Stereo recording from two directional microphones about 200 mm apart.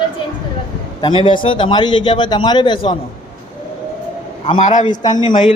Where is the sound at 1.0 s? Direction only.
25° left (ahead or behind).